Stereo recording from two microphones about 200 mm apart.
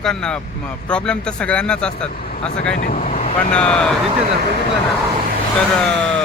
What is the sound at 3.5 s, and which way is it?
Speech, 5° left (ahead or behind).